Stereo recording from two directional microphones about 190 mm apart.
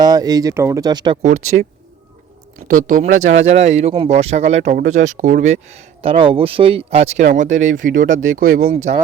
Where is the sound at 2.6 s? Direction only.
45° right (ahead or behind).